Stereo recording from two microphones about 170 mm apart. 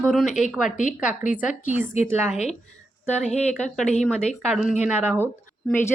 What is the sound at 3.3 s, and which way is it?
Speech, 40° left (ahead or behind).